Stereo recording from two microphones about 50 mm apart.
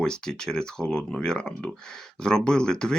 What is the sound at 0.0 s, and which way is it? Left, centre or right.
Speech, centre.